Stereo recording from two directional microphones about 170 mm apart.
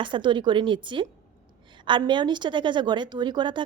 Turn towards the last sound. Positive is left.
turn(degrees=-25)  # may be behind; listen again after turning